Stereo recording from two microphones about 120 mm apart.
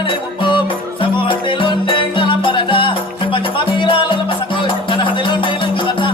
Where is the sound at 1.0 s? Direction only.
45° left (ahead or behind).